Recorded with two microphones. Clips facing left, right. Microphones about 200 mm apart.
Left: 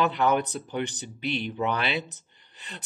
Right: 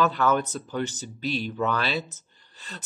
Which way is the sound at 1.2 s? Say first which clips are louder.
Right 1 dB; 60° left (ahead or behind).